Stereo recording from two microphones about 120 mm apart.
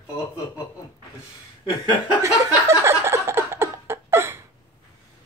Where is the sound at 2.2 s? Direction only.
20° right (ahead or behind).